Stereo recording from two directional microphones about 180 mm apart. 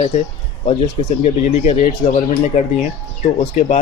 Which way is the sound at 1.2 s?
40° left (ahead or behind).